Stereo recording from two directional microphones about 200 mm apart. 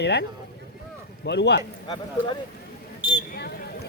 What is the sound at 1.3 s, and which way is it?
Speech, 60° left (ahead or behind).